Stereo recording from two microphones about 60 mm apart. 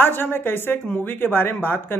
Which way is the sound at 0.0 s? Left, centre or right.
Left.